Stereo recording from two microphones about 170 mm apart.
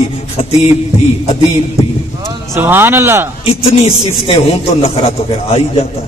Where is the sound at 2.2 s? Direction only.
15° right (ahead or behind).